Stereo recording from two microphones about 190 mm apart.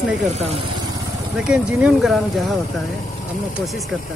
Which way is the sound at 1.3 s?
5° right (ahead or behind).